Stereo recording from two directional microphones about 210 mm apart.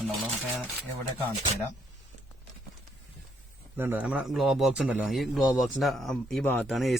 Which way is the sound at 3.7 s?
10° right (ahead or behind).